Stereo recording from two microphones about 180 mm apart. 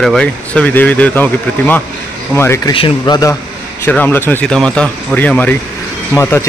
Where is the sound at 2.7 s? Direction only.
25° left (ahead or behind).